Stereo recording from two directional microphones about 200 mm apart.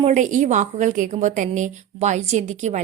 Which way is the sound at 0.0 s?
35° right (ahead or behind).